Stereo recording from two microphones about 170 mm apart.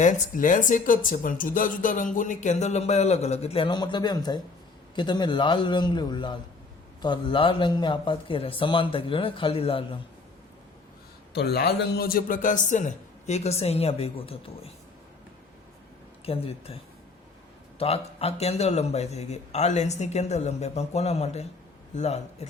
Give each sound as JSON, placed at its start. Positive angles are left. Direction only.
{"t": 0.0, "sound": "a man's voice", "side_deg": 50}
{"t": 11.3, "sound": "speech", "side_deg": 70}
{"t": 16.2, "sound": "speech", "side_deg": 35}
{"t": 17.7, "sound": "speech", "side_deg": 35}